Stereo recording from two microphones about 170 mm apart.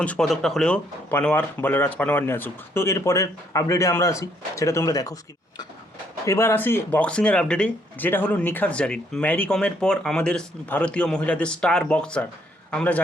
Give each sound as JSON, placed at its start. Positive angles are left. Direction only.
{"t": 0.0, "sound": "speech", "side_deg": 5}
{"t": 6.2, "sound": "speech", "side_deg": 15}